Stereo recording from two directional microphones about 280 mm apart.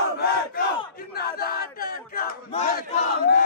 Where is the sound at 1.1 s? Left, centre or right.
Left.